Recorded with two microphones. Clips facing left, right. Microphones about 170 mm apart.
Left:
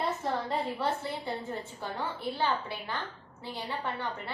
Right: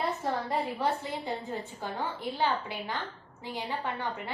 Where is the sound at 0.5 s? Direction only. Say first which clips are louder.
Right 1 dB; 15° right (ahead or behind).